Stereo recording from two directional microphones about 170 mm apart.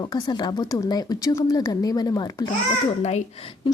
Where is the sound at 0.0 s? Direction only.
25° left (ahead or behind).